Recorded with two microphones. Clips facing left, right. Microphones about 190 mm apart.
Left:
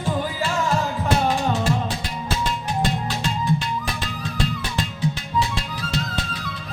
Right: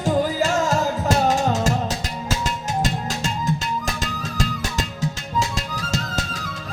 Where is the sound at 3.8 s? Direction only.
45° right (ahead or behind).